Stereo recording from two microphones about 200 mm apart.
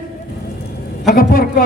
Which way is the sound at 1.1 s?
45° left (ahead or behind).